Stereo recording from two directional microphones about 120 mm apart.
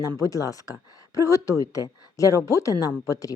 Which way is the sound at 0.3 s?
30° left (ahead or behind).